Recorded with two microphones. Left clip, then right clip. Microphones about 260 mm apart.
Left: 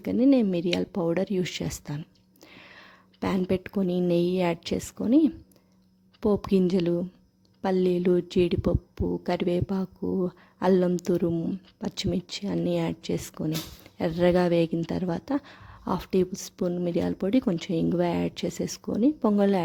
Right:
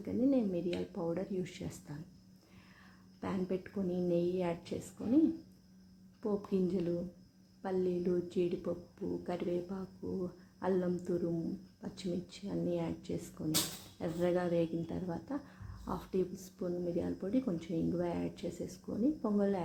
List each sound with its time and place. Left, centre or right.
0.0 s a woman's voice: left